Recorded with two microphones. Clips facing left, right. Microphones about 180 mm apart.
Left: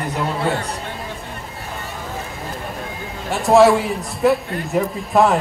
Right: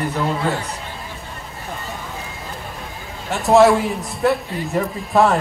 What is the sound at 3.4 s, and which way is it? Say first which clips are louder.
A man's voice: even; centre (ahead or behind).